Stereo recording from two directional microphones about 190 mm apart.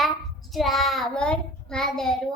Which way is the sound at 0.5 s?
Centre (ahead or behind).